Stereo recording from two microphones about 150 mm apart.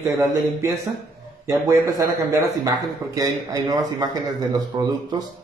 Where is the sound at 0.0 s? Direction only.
20° right (ahead or behind).